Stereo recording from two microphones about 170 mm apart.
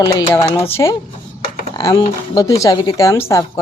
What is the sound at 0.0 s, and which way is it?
Speech, 25° left (ahead or behind).